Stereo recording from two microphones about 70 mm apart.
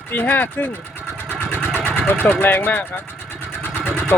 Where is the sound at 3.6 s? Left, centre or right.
Right.